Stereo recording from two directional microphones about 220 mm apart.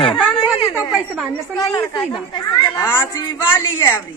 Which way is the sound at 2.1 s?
20° left (ahead or behind).